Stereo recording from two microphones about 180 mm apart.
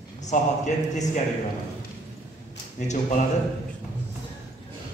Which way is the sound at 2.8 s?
40° left (ahead or behind).